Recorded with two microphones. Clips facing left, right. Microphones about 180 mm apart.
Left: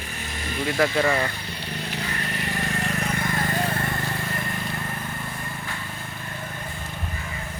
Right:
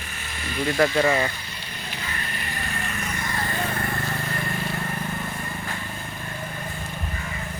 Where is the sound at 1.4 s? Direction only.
60° left (ahead or behind).